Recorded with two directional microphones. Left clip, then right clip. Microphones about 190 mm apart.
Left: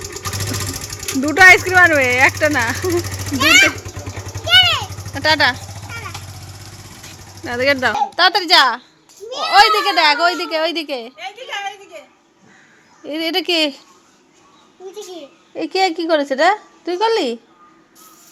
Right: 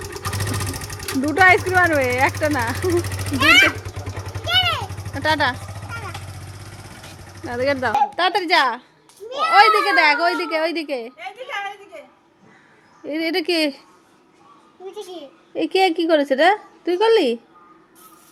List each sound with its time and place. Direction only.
0.0 s speech: centre (ahead or behind)
3.8 s vehicle: 45° left (ahead or behind)
4.4 s vehicle: 50° right (ahead or behind)
5.1 s a child's voice: centre (ahead or behind)
5.9 s vehicle: 25° right (ahead or behind)
7.4 s a child's voice: 5° left (ahead or behind)
11.2 s a sound: 55° right (ahead or behind)
13.1 s speech: 10° right (ahead or behind)
15.5 s a woman's voice: 25° right (ahead or behind)